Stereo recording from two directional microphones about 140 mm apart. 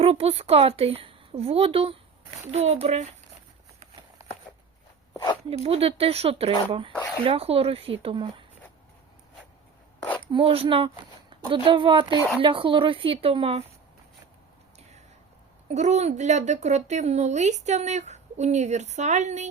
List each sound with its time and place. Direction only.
0.0 s a woman's voice: 45° right (ahead or behind)
5.1 s speech: 25° left (ahead or behind)
5.5 s a woman's voice: 45° right (ahead or behind)
10.3 s a woman's voice: 40° right (ahead or behind)
15.7 s a woman's voice: 55° right (ahead or behind)